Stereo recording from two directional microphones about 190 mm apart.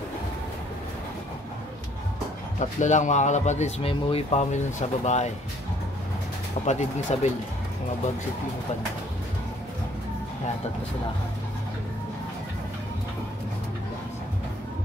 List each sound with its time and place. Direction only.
2.6 s speech: 40° left (ahead or behind)
6.6 s speech: 40° left (ahead or behind)